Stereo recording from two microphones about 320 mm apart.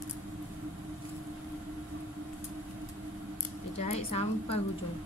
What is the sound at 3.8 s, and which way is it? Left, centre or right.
Speech, centre.